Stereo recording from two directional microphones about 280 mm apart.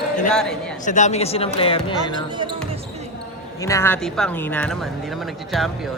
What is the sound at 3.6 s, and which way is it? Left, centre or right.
Speech, centre.